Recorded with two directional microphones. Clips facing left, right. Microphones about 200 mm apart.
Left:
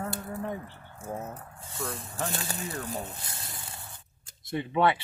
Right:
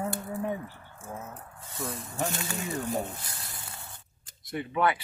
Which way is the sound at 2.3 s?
35° left (ahead or behind).